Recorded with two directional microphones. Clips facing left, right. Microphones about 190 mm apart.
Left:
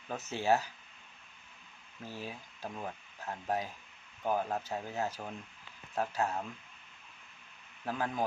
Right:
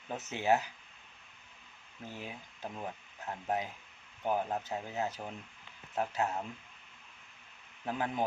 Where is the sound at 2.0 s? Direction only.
20° right (ahead or behind).